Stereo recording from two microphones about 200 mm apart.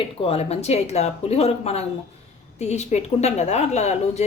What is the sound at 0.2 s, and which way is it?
Speech, 30° left (ahead or behind).